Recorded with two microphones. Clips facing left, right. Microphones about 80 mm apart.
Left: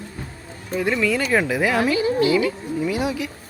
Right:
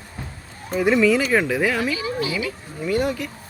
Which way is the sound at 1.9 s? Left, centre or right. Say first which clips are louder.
Left 7 dB; left.